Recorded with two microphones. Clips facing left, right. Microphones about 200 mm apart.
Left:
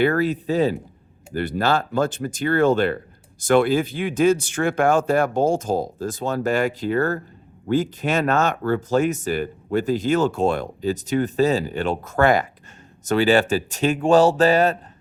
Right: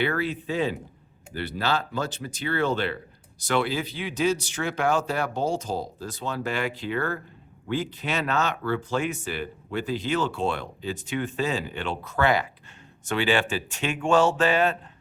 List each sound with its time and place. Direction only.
0.0 s speech: 45° left (ahead or behind)